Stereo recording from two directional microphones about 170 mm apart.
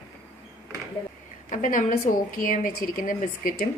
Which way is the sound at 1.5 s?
50° left (ahead or behind).